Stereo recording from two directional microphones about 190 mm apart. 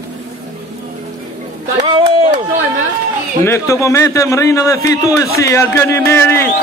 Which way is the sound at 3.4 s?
15° left (ahead or behind).